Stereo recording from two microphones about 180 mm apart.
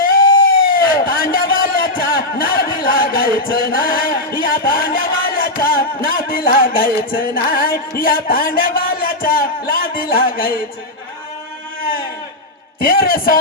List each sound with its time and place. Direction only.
0.0 s a sound: 55° left (ahead or behind)
4.4 s music: 55° left (ahead or behind)
12.8 s music: 55° left (ahead or behind)